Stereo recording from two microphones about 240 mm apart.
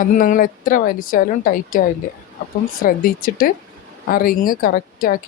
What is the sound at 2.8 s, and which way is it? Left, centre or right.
Speech, left.